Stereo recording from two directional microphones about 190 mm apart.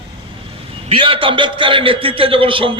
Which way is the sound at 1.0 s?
25° right (ahead or behind).